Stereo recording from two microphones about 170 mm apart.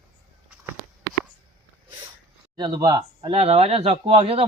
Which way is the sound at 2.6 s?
25° right (ahead or behind).